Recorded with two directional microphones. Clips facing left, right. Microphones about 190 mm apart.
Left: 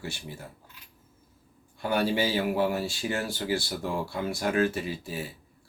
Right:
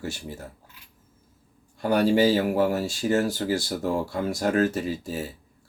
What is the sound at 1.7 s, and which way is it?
Speech, 40° right (ahead or behind).